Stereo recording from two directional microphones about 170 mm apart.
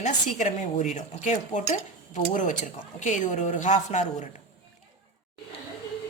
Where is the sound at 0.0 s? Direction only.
45° left (ahead or behind).